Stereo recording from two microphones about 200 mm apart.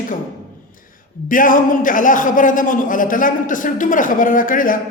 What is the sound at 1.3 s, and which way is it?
A man's voice, 40° left (ahead or behind).